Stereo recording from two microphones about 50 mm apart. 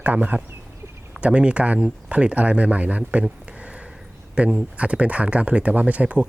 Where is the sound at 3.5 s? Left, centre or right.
Right.